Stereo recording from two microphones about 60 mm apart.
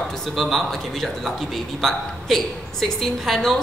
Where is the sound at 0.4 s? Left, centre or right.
Centre.